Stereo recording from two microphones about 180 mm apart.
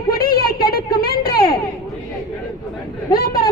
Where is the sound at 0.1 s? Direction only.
55° left (ahead or behind).